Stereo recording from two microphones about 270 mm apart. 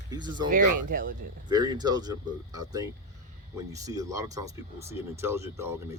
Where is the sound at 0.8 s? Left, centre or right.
Right.